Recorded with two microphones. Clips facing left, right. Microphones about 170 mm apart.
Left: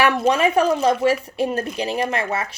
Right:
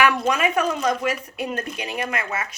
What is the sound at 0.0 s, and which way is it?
A woman's voice, 30° left (ahead or behind).